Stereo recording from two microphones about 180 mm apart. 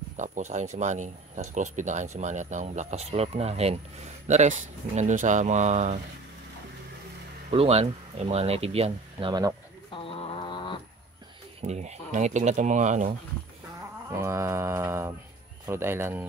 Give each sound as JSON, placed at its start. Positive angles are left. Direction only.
{"t": 0.2, "sound": "speech", "side_deg": -40}
{"t": 7.5, "sound": "speech", "side_deg": -35}
{"t": 9.8, "sound": "mantra", "side_deg": 30}
{"t": 11.6, "sound": "speech", "side_deg": -40}
{"t": 14.1, "sound": "mantra", "side_deg": -15}